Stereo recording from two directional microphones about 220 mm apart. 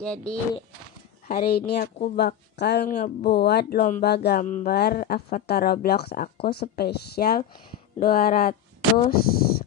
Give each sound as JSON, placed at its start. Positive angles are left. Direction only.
{"t": 0.0, "sound": "speech", "side_deg": 5}
{"t": 1.2, "sound": "speech", "side_deg": 40}
{"t": 9.3, "sound": "a sound", "side_deg": 45}